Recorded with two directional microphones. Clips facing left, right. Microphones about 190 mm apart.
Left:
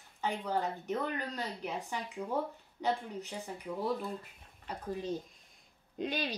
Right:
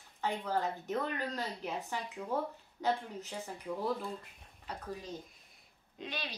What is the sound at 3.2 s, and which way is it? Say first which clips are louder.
Speech: left 1 dB; centre (ahead or behind).